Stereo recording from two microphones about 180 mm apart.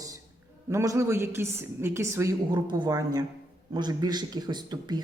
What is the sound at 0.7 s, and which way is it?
A woman's voice, 15° right (ahead or behind).